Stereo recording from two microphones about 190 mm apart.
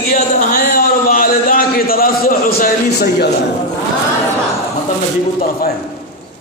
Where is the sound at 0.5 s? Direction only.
55° left (ahead or behind).